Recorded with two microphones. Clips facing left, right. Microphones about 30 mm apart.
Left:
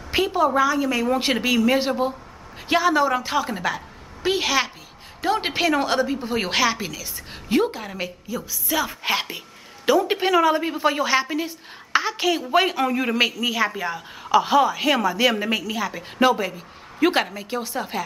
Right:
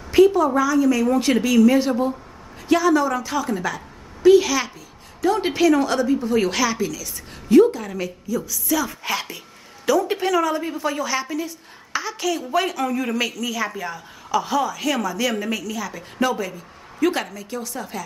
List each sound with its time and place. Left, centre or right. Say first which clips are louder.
0.1 s a woman's voice: right 5 dB; left